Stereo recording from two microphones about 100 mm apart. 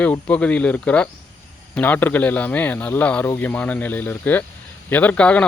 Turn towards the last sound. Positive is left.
turn(degrees=10)  # may be behind; listen again after turning